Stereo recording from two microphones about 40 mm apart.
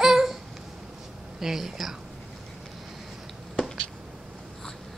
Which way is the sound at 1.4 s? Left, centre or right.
Centre.